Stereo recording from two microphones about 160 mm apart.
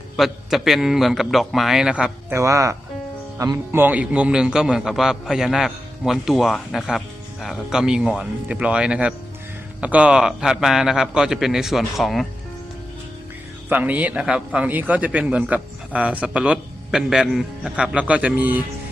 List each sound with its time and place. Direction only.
0.2 s a man's voice: centre (ahead or behind)
2.3 s a man's voice: 20° right (ahead or behind); by 12.2 s centre (ahead or behind)
13.7 s a man's voice: 10° right (ahead or behind)